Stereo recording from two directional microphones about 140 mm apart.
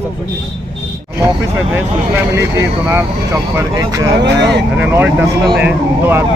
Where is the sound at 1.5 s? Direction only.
15° right (ahead or behind).